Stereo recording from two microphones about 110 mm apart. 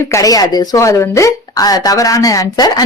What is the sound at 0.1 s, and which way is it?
A woman's voice, 35° left (ahead or behind).